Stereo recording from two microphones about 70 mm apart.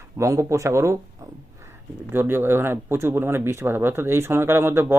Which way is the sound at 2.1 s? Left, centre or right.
Right.